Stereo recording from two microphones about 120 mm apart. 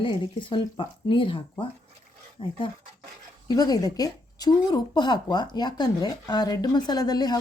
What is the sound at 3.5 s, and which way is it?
Speech, 35° left (ahead or behind).